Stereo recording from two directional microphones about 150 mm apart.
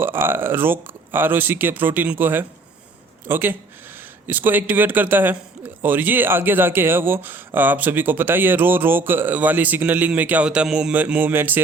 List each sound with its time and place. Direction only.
0.0 s speech: 15° right (ahead or behind)